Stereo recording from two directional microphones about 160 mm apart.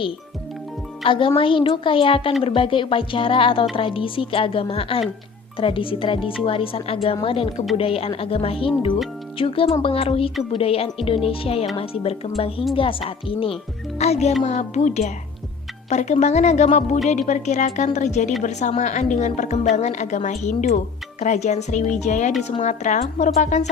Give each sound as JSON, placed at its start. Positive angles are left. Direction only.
{"t": 1.0, "sound": "a woman's voice", "side_deg": 30}